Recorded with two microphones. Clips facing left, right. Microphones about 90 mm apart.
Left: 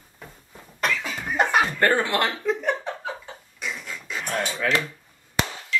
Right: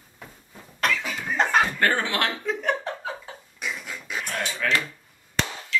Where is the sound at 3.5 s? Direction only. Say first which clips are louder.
Even; 5° right (ahead or behind).